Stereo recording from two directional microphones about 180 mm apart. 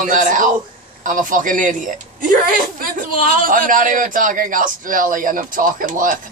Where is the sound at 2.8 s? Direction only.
50° right (ahead or behind).